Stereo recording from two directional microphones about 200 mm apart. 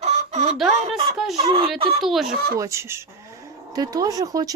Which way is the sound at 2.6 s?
15° right (ahead or behind).